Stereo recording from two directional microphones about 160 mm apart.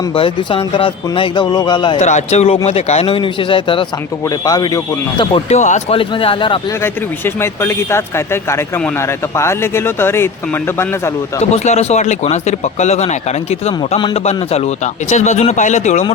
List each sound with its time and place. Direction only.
0.1 s speech: 35° left (ahead or behind)
2.0 s speech: 45° left (ahead or behind)
4.3 s speech: 20° left (ahead or behind)
5.5 s speech: 50° left (ahead or behind)
6.0 s speech: 35° left (ahead or behind)
6.8 s speech: 15° left (ahead or behind)
11.5 s speech: 45° left (ahead or behind)